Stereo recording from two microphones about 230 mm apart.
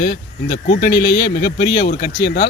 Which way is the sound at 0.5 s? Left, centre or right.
Left.